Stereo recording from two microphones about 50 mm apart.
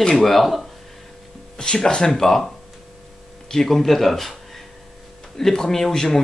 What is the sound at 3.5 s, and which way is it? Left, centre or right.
Speech, centre.